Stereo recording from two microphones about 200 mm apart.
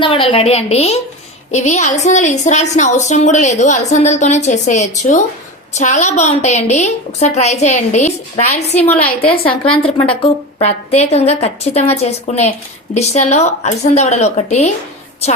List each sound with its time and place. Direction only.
0.0 s a woman's voice: 25° left (ahead or behind)